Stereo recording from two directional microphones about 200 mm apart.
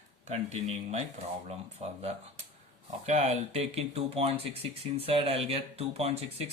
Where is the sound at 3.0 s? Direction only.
35° right (ahead or behind).